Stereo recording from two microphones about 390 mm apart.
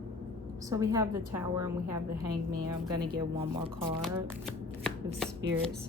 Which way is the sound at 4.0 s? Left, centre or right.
Centre.